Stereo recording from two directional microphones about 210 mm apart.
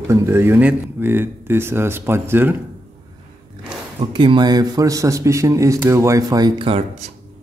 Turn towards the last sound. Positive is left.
turn(degrees=-25)  # may be behind; listen again after turning